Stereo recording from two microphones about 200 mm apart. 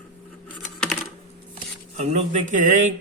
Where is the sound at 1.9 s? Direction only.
35° right (ahead or behind).